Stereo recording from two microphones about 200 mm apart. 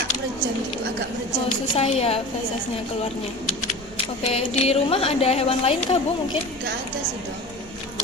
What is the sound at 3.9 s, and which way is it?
A woman's voice, 30° left (ahead or behind).